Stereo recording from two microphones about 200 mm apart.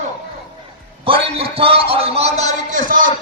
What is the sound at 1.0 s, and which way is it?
A man's voice, 25° right (ahead or behind).